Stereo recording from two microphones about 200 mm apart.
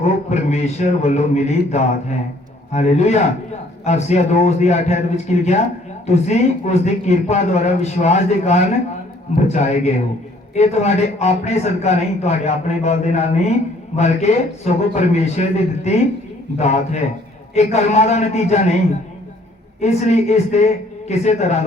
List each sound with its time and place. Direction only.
0.0 s a man's voice: 35° left (ahead or behind)
19.8 s a man's voice: 35° left (ahead or behind)